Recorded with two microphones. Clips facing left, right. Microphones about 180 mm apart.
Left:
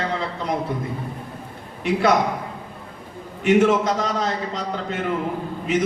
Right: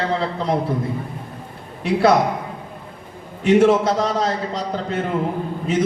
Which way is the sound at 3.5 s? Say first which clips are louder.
Right 3 dB; 35° right (ahead or behind).